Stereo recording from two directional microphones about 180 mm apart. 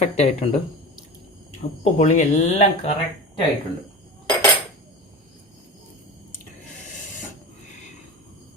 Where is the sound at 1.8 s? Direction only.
40° left (ahead or behind).